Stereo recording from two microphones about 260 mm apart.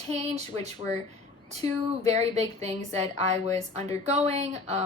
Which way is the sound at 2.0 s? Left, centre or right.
Right.